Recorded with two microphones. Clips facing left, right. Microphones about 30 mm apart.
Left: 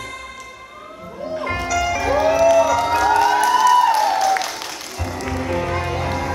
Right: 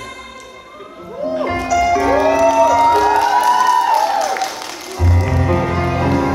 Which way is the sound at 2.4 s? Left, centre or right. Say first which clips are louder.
Right 1 dB; right.